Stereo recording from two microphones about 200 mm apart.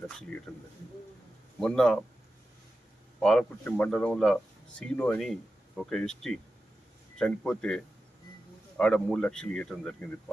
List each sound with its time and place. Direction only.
0.5 s speech: centre (ahead or behind)
1.6 s speech: 5° left (ahead or behind)
3.2 s speech: 5° left (ahead or behind)
8.8 s speech: 5° left (ahead or behind)